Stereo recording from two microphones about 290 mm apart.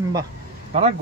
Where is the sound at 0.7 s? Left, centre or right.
Right.